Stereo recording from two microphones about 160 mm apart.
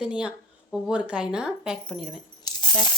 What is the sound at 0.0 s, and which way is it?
Speech, 5° right (ahead or behind).